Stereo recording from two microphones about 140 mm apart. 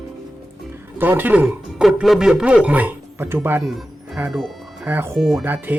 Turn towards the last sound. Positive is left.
turn(degrees=-15)  # may be behind; listen again after turning